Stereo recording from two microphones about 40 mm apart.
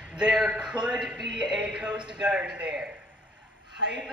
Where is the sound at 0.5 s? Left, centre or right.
Right.